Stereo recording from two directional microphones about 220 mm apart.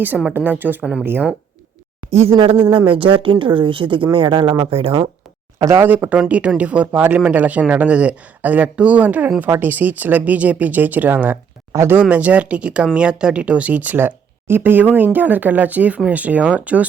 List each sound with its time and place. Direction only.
0.0 s speech: 5° right (ahead or behind)
2.1 s speech: 25° right (ahead or behind)
5.5 s speech: 10° right (ahead or behind)